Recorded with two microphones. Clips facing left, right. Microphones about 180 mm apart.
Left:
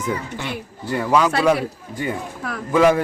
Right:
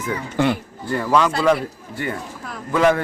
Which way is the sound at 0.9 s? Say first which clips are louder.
Even; 10° left (ahead or behind).